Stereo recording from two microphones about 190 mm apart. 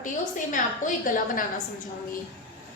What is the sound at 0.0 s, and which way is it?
A woman's voice, 45° left (ahead or behind).